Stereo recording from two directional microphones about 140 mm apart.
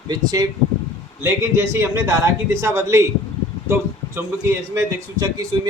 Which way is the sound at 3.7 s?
15° right (ahead or behind).